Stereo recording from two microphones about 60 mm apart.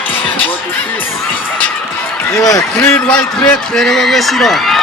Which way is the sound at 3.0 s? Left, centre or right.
Centre.